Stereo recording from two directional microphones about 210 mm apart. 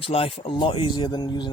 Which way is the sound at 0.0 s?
25° left (ahead or behind).